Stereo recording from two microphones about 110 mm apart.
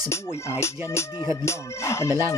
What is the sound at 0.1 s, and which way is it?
Music, 25° left (ahead or behind).